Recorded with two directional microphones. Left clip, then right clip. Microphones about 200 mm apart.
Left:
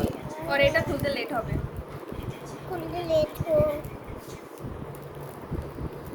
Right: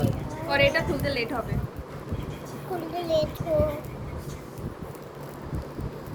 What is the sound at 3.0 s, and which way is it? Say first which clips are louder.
Speech: left 1 dB; 35° left (ahead or behind).